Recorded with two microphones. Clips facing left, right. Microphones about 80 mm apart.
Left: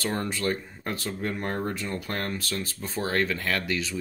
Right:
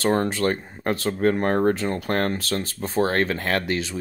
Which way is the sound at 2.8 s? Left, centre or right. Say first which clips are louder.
Right 6 dB; right.